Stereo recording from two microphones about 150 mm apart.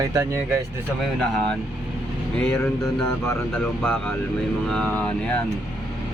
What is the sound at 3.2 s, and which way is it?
Speech, 10° left (ahead or behind).